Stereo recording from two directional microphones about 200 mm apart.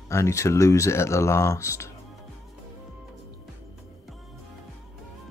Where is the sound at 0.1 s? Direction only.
15° left (ahead or behind).